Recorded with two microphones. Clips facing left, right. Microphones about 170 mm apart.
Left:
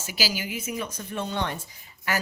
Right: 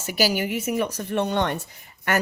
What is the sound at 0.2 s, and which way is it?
Speech, 60° right (ahead or behind).